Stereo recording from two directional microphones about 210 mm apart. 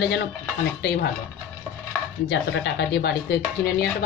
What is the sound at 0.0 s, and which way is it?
Speech, 55° left (ahead or behind).